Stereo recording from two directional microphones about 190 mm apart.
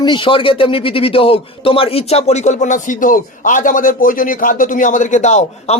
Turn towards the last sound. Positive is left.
turn(degrees=40)  # may be behind; listen again after turning